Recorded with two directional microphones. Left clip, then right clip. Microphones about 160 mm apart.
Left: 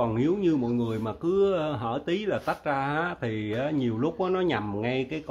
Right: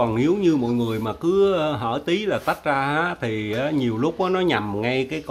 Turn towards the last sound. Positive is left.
turn(degrees=-5)  # may be behind; listen again after turning